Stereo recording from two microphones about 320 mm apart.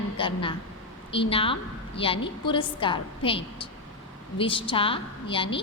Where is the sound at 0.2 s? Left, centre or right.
Centre.